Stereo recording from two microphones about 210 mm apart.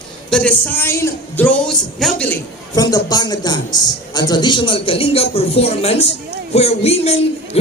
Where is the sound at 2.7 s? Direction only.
20° left (ahead or behind).